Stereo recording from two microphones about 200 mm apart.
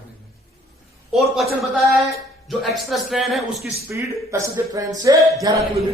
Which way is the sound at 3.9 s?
15° right (ahead or behind).